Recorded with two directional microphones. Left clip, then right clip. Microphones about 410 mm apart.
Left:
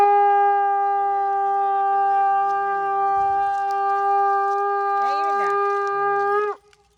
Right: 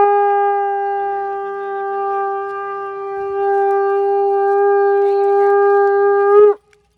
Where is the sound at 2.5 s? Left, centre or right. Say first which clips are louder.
Left 3 dB; centre.